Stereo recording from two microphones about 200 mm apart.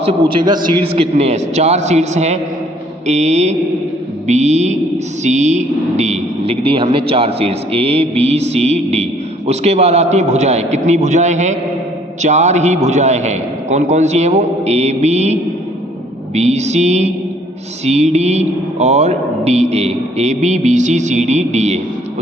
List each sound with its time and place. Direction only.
0.0 s a man's voice: 25° right (ahead or behind)